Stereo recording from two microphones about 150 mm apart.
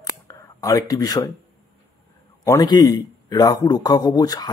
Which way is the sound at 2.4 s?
25° left (ahead or behind).